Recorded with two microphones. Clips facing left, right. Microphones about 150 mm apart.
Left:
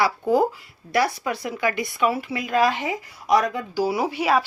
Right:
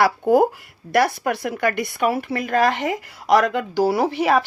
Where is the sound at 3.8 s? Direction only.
55° right (ahead or behind).